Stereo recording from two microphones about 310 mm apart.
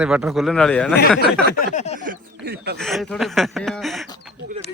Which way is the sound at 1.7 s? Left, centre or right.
Left.